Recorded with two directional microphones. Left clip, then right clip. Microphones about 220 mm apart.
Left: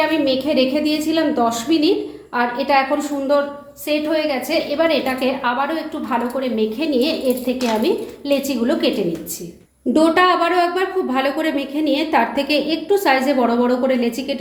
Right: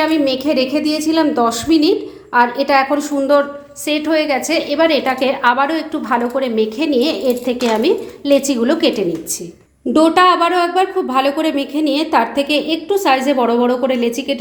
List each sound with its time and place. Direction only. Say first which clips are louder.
0.3 s a woman's voice: right 1 dB; 30° right (ahead or behind)
9.9 s speech: right 3 dB; 25° right (ahead or behind)